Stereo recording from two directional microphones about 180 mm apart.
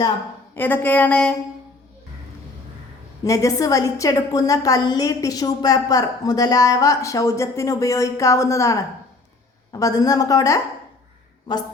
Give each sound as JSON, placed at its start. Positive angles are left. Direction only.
{"t": 0.5, "sound": "a woman's voice", "side_deg": 10}
{"t": 3.2, "sound": "a woman's voice", "side_deg": 15}